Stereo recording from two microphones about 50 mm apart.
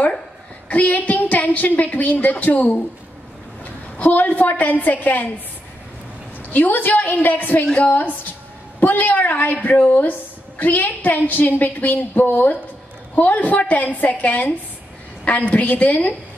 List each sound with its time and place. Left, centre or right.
0.7 s a woman's voice: left
4.0 s a woman's voice: left
6.5 s a woman's voice: left
7.6 s a woman's voice: centre
7.9 s a woman's voice: left